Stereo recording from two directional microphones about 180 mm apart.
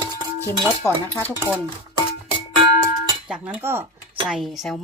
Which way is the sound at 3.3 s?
5° right (ahead or behind).